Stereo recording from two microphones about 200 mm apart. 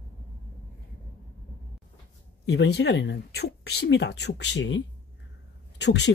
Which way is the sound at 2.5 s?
55° left (ahead or behind).